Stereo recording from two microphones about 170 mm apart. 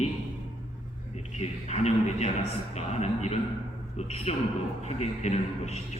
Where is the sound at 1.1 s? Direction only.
40° left (ahead or behind).